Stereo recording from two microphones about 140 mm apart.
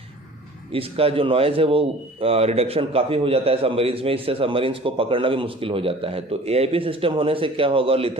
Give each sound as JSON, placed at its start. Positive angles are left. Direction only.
{"t": 0.7, "sound": "a man's voice", "side_deg": -40}